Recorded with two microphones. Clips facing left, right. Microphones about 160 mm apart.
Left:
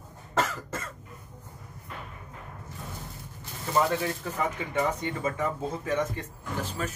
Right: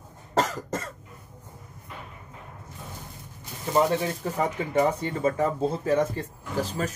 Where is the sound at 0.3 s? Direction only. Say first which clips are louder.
Right 3 dB; 35° right (ahead or behind).